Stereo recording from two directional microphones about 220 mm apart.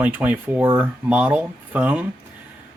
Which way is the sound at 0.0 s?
5° right (ahead or behind).